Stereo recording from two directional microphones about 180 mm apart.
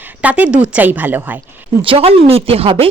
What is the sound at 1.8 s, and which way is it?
Speech, 30° right (ahead or behind).